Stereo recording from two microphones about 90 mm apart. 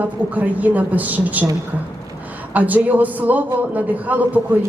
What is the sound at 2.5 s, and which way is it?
A man's voice, 20° right (ahead or behind).